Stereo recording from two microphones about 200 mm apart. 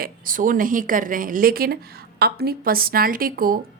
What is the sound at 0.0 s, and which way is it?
Speech, 45° right (ahead or behind).